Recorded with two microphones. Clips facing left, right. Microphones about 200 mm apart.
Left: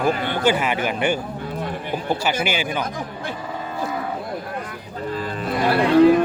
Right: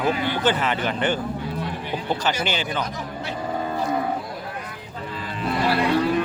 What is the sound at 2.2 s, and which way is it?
Speech, 10° left (ahead or behind).